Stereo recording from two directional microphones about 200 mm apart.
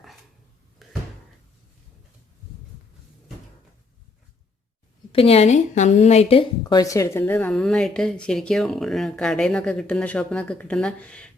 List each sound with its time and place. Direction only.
0.8 s a sound: centre (ahead or behind)
5.1 s a woman's voice: 30° left (ahead or behind)
6.6 s a woman's voice: 20° left (ahead or behind)